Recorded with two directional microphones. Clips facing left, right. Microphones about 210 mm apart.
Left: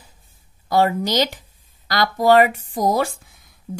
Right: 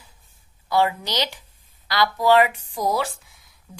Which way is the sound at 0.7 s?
45° left (ahead or behind).